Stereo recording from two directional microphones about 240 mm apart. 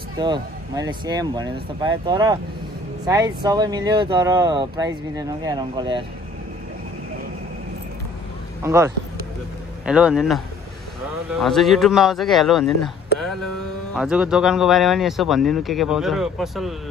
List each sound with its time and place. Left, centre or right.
0.2 s speech: centre
8.6 s a man's voice: centre